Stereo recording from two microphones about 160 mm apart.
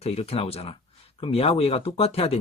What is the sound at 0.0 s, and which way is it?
Speech, 40° left (ahead or behind).